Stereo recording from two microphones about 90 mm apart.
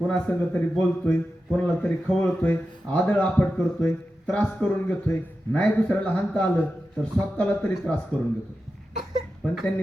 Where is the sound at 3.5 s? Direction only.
5° left (ahead or behind).